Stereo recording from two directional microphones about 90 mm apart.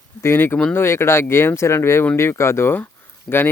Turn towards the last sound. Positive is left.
turn(degrees=55)  # may be behind; listen again after turning